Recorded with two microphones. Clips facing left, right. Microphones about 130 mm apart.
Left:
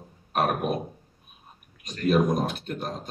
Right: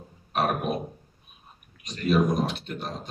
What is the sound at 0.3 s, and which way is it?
Speech, 50° left (ahead or behind).